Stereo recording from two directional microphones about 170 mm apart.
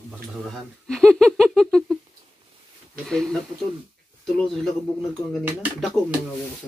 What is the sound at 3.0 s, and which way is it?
Speech, 5° left (ahead or behind).